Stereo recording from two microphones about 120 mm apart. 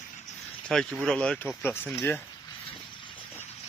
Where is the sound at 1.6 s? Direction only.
15° left (ahead or behind).